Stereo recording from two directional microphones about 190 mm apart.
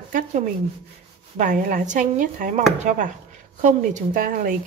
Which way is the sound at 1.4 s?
45° right (ahead or behind).